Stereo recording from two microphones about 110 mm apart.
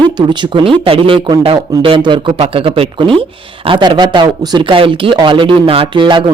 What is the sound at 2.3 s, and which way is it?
Speech, 70° right (ahead or behind).